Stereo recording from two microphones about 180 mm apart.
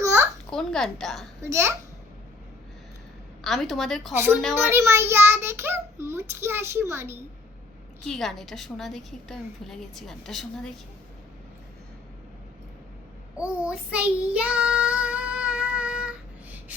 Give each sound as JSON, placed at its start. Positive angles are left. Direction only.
{"t": 0.0, "sound": "a sound", "side_deg": -15}
{"t": 0.5, "sound": "a woman's voice", "side_deg": 5}
{"t": 1.4, "sound": "a child's voice", "side_deg": -15}
{"t": 3.4, "sound": "a woman's voice", "side_deg": 0}
{"t": 4.1, "sound": "a child's voice", "side_deg": -10}
{"t": 8.0, "sound": "a woman's voice", "side_deg": 0}
{"t": 13.3, "sound": "child singing", "side_deg": -5}